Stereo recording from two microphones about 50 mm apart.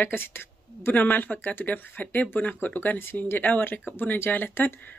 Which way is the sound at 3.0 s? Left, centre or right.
Left.